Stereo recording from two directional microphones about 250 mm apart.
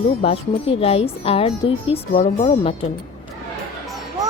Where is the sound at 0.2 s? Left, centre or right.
Left.